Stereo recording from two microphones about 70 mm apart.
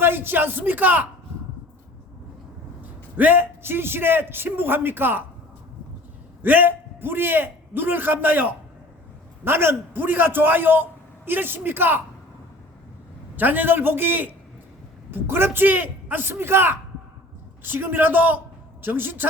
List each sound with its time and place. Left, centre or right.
0.0 s a man's voice: right
2.8 s a man's voice: right
6.4 s a man's voice: right
13.3 s a man's voice: right